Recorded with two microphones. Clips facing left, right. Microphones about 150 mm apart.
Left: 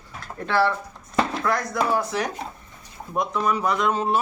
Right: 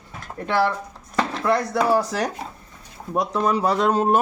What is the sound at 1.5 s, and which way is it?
Speech, 30° right (ahead or behind).